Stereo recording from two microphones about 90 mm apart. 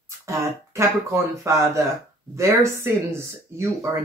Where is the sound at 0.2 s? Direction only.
35° right (ahead or behind).